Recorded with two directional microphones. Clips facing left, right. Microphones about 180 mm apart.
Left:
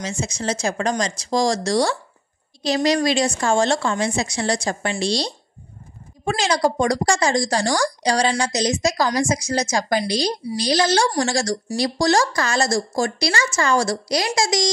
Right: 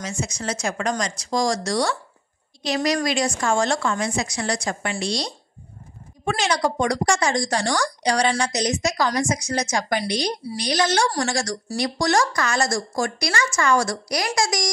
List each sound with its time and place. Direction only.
0.0 s a woman's voice: 25° left (ahead or behind)